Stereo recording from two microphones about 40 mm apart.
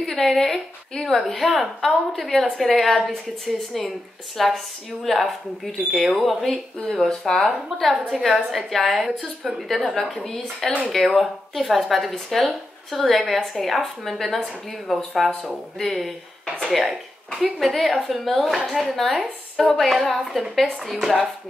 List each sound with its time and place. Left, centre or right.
0.0 s a woman's voice: centre
10.2 s a woman's voice: centre
10.9 s speech: centre